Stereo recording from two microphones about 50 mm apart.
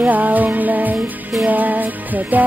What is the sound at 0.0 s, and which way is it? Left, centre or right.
Music, right.